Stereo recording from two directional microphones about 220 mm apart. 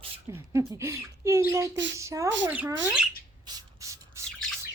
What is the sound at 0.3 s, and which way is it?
Speech, 15° right (ahead or behind).